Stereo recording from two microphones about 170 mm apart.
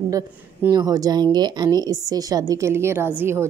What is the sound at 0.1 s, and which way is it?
A woman's voice, 20° right (ahead or behind).